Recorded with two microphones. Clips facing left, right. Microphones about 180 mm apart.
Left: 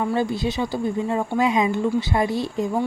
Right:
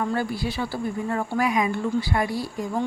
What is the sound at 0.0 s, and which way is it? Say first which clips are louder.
Speech: left 3 dB; 20° left (ahead or behind).